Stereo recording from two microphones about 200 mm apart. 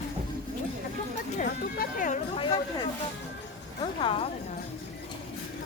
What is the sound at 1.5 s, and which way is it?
Music, 45° left (ahead or behind).